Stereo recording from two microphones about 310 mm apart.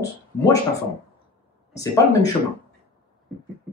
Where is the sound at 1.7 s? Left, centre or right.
Centre.